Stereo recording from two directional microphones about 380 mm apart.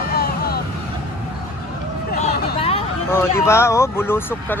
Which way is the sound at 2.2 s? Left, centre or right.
Left.